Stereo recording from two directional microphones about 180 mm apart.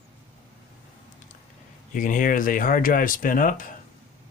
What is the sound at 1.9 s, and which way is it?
Speech, 45° left (ahead or behind).